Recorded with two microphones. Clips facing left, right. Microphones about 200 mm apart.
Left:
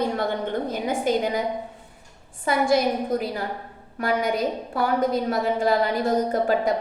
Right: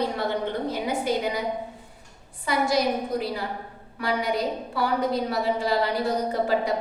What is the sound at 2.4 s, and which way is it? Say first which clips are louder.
A woman's voice: left 3 dB; 50° left (ahead or behind).